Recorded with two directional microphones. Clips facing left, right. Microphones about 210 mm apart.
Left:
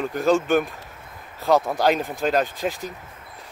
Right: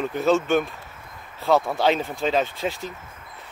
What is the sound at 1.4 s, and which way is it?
Speech, 15° left (ahead or behind).